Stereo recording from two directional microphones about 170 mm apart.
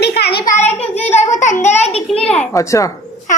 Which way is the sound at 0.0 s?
75° left (ahead or behind).